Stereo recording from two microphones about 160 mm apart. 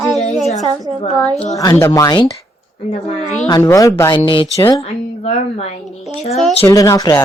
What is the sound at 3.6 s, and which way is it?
Speech, 20° left (ahead or behind).